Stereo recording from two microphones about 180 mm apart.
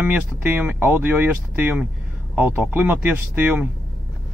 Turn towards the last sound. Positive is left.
turn(degrees=-10)  # may be behind; listen again after turning